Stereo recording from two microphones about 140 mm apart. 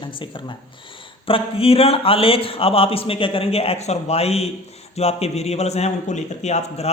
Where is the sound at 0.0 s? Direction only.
35° left (ahead or behind).